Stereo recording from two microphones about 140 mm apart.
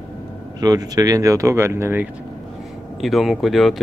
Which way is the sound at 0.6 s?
25° right (ahead or behind).